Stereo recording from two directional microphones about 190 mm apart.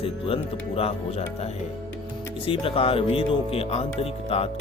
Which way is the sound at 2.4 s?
30° left (ahead or behind).